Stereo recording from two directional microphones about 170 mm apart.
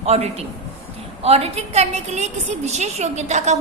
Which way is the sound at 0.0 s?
40° right (ahead or behind).